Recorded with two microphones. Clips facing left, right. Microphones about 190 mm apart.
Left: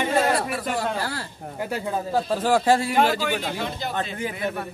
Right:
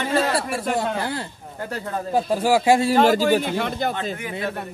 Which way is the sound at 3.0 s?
40° right (ahead or behind).